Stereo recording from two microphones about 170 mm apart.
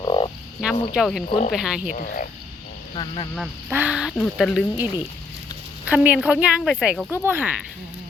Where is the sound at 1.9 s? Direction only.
55° left (ahead or behind).